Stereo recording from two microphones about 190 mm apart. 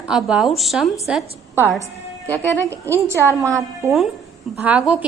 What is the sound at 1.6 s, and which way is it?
Speech, 10° left (ahead or behind).